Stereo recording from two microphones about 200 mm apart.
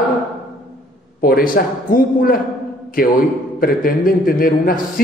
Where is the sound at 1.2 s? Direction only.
45° left (ahead or behind).